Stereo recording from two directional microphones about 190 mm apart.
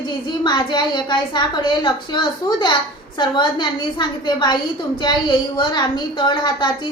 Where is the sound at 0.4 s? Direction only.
25° left (ahead or behind).